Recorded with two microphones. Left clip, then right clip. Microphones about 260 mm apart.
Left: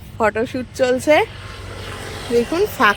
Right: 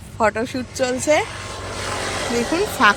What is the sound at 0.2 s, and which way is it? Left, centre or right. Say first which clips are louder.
Speech: left 1 dB; centre.